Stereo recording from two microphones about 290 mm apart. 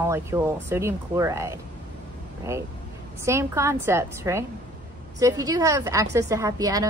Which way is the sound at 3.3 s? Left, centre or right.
Centre.